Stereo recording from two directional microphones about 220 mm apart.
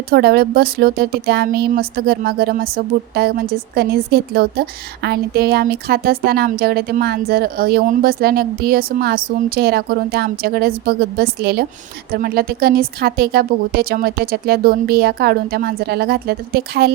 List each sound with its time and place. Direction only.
0.1 s speech: 45° right (ahead or behind)